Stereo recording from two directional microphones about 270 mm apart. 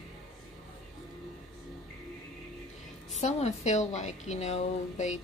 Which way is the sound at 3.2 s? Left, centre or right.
Left.